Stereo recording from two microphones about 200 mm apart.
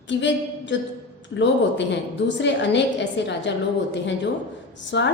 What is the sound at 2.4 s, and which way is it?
A woman's voice, 60° left (ahead or behind).